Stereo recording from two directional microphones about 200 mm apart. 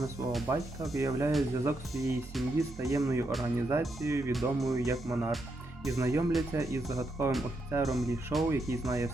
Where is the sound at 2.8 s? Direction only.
15° right (ahead or behind).